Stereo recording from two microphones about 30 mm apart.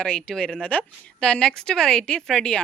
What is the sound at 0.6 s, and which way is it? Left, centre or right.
Speech, left.